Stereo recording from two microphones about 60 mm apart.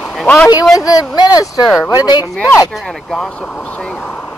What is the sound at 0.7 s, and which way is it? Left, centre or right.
Speech, left.